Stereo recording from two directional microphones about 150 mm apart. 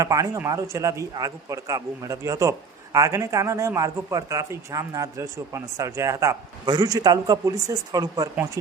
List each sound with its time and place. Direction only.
0.0 s speech: 20° right (ahead or behind)